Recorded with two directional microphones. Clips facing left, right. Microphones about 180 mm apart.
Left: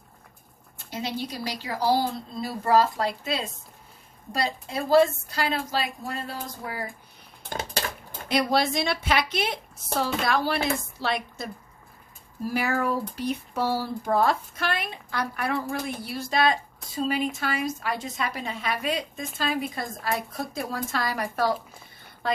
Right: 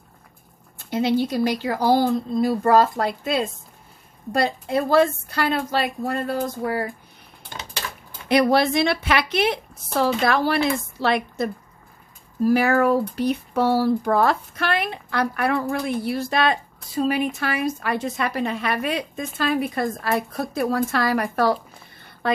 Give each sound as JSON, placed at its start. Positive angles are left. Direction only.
{"t": 0.8, "sound": "a woman's voice", "side_deg": -55}
{"t": 7.4, "sound": "a sound", "side_deg": 50}
{"t": 8.3, "sound": "speech", "side_deg": -60}